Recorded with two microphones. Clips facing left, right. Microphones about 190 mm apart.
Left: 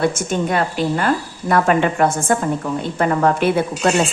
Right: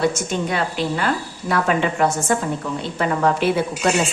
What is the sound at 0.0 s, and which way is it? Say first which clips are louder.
A woman's voice: left 2 dB; 50° left (ahead or behind).